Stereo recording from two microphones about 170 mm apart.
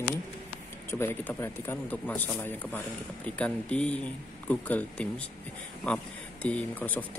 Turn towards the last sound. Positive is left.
turn(degrees=10)  # may be behind; listen again after turning